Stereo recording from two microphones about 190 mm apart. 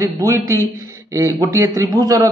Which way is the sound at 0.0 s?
15° right (ahead or behind).